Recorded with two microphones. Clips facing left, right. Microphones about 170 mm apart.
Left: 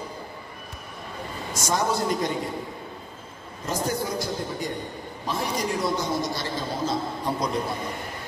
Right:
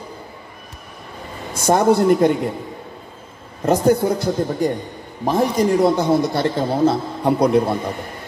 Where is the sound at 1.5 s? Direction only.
55° right (ahead or behind).